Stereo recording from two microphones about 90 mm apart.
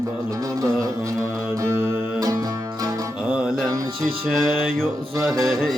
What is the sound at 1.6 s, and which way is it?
Music, 30° right (ahead or behind).